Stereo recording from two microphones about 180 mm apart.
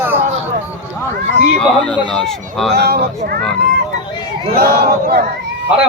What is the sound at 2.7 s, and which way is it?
Battle cry, 65° right (ahead or behind).